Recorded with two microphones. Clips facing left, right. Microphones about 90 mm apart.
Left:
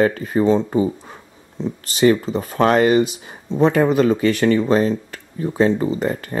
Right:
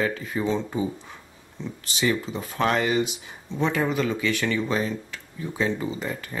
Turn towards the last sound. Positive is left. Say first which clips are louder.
# left 9 dB
turn(degrees=50)  # may be behind; listen again after turning